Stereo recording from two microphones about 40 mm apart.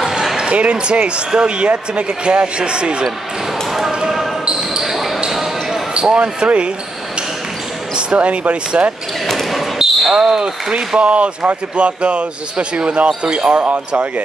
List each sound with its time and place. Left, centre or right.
0.5 s speech: right
3.9 s basketball bounce: centre
5.9 s speech: right
8.2 s speech: right
9.2 s basketball bounce: centre
10.2 s speech: right
13.6 s speech: right